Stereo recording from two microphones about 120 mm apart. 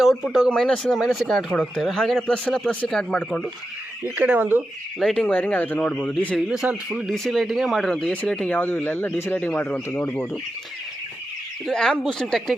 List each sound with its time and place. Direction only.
0.0 s speech: centre (ahead or behind)
4.0 s speech: 15° right (ahead or behind)
4.9 s speech: 5° left (ahead or behind)
6.5 s speech: 5° right (ahead or behind); by 10.2 s 15° left (ahead or behind)
11.6 s speech: 5° left (ahead or behind)